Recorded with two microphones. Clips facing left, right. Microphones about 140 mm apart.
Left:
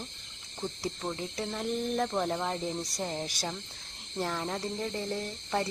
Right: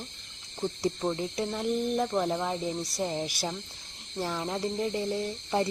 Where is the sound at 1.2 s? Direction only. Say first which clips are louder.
Right 4 dB; 15° right (ahead or behind).